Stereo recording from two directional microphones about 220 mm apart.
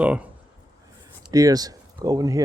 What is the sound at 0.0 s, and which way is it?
Speech, 5° right (ahead or behind).